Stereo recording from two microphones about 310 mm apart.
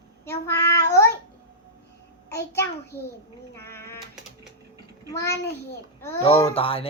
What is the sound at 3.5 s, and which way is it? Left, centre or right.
Sheep, centre.